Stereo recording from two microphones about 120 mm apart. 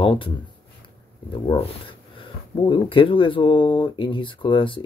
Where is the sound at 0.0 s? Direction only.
45° left (ahead or behind).